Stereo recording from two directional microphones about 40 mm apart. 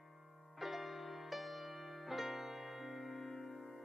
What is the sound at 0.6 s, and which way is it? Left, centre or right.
Music, centre.